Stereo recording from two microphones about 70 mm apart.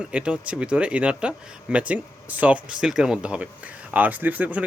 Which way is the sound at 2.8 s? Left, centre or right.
Centre.